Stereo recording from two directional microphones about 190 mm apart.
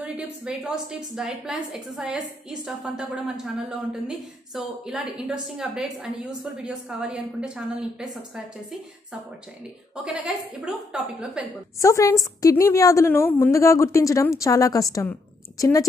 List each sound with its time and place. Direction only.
0.0 s a woman's voice: 5° right (ahead or behind)
4.1 s a woman's voice: 5° right (ahead or behind)
10.0 s a woman's voice: 5° right (ahead or behind)
11.8 s a woman's voice: 15° left (ahead or behind)